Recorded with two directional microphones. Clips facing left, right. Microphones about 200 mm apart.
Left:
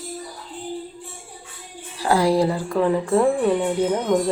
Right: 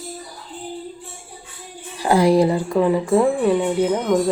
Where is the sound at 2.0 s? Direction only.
20° right (ahead or behind).